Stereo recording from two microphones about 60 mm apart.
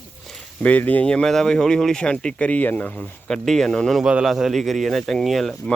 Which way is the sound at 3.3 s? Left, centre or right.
Centre.